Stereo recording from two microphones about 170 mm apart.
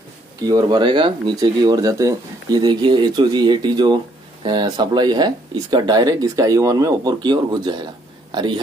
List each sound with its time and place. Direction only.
0.5 s speech: 25° right (ahead or behind)